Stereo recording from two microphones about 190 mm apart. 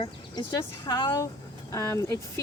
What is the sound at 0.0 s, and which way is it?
Speech, 25° left (ahead or behind).